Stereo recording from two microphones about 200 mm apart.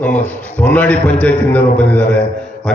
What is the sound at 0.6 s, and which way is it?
A man's voice, 5° left (ahead or behind).